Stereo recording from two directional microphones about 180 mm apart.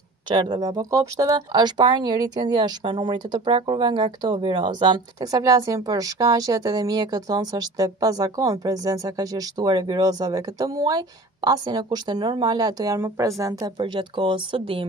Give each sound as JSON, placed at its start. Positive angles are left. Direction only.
{"t": 0.3, "sound": "speech", "side_deg": -25}